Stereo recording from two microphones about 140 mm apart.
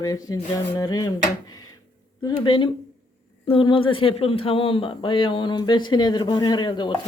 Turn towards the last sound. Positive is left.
turn(degrees=35)  # may be behind; listen again after turning